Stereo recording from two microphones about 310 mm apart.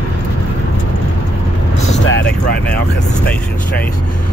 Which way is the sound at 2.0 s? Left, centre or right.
Left.